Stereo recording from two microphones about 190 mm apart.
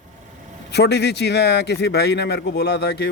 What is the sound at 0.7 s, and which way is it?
A man's voice, 60° left (ahead or behind).